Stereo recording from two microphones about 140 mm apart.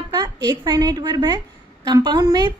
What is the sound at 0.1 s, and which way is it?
A woman's voice, 30° right (ahead or behind).